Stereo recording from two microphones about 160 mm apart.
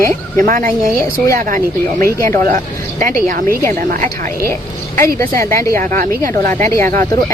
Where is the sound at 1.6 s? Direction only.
15° left (ahead or behind).